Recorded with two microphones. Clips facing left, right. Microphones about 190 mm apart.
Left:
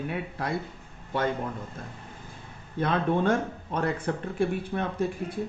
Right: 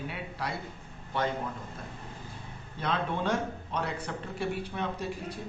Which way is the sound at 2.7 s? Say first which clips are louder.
Left 6 dB; 55° left (ahead or behind).